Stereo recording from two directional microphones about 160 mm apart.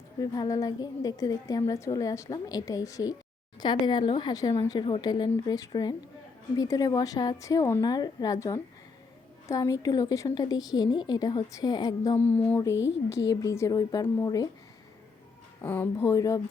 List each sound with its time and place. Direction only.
0.2 s a woman's voice: 20° left (ahead or behind)
12.1 s a woman's voice: 10° left (ahead or behind)
15.6 s speech: 10° left (ahead or behind)